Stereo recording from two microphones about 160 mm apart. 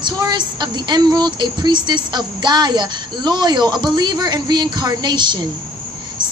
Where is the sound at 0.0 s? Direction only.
25° right (ahead or behind).